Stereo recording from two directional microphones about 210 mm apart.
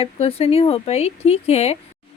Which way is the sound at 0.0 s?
30° left (ahead or behind).